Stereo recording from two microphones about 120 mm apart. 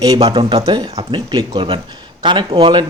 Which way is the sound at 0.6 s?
35° right (ahead or behind).